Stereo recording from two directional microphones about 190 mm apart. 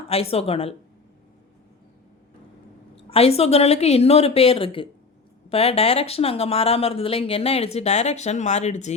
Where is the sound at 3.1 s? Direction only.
30° left (ahead or behind).